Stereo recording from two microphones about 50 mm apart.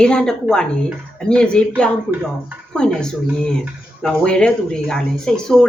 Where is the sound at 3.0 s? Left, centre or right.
Centre.